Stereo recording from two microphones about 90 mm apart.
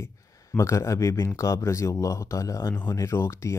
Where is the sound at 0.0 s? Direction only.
30° left (ahead or behind).